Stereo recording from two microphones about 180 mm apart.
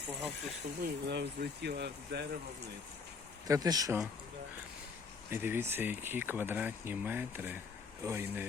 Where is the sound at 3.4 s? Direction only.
20° right (ahead or behind).